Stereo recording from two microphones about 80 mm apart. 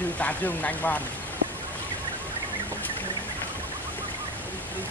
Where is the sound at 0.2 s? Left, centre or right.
Left.